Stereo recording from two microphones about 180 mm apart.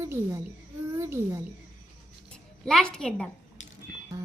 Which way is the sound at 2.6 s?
5° left (ahead or behind).